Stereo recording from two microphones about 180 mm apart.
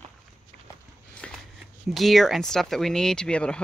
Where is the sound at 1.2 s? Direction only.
5° left (ahead or behind).